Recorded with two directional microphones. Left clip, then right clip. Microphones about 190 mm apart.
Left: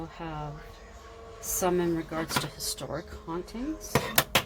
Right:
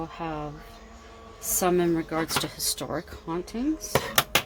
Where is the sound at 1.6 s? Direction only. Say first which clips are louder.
Right 4 dB; 45° right (ahead or behind).